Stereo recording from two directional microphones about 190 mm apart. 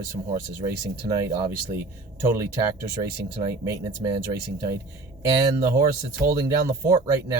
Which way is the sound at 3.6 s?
15° right (ahead or behind).